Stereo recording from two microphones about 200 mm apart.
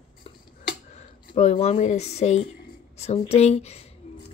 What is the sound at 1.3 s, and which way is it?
A woman's voice, 35° left (ahead or behind).